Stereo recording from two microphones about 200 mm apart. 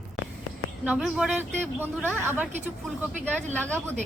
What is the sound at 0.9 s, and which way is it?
A woman's voice, 5° right (ahead or behind).